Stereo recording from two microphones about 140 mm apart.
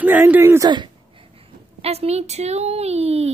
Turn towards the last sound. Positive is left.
turn(degrees=-50)  # may be behind; listen again after turning